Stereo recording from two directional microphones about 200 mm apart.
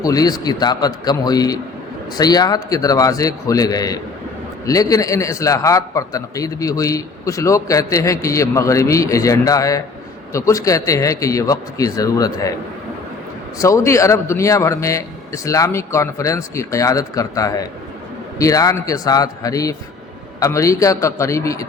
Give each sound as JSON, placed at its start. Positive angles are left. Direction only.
{"t": 0.0, "sound": "a man's voice", "side_deg": 20}
{"t": 13.6, "sound": "a man's voice", "side_deg": 15}